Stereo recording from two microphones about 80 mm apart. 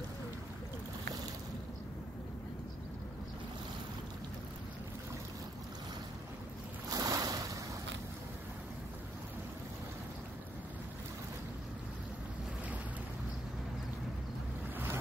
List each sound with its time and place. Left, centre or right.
6.9 s boat: right